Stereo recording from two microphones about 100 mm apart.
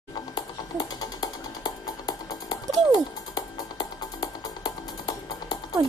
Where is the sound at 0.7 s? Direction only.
45° left (ahead or behind).